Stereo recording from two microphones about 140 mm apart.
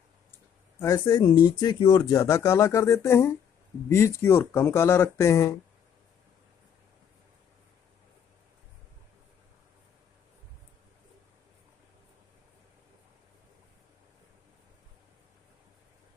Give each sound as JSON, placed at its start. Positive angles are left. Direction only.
{"t": 0.7, "sound": "speech", "side_deg": 25}